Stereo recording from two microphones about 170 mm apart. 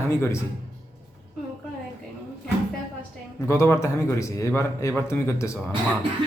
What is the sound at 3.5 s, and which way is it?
A man's voice, 15° left (ahead or behind).